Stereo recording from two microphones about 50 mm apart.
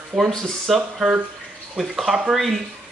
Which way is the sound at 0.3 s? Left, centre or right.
Centre.